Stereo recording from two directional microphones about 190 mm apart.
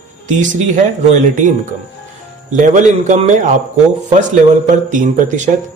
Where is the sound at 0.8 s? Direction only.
40° right (ahead or behind).